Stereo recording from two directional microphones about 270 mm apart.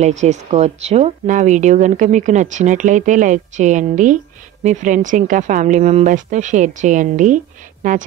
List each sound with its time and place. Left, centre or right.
0.0 s speech: right